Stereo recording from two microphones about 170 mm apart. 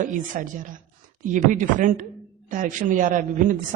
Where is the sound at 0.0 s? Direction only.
50° right (ahead or behind).